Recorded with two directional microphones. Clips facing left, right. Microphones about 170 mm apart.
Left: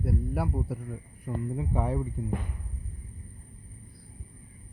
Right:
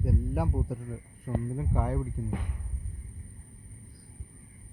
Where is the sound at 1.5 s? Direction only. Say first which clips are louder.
Left 4 dB; 15° left (ahead or behind).